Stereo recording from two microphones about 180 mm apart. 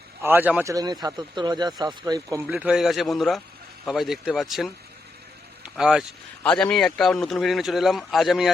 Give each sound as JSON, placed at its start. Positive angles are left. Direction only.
{"t": 0.2, "sound": "speech", "side_deg": -10}
{"t": 2.4, "sound": "speech", "side_deg": -5}